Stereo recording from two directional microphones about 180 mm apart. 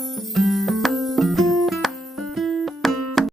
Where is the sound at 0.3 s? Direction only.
Centre (ahead or behind).